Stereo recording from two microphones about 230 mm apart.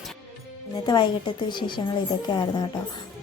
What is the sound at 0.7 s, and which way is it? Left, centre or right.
A woman's voice, centre.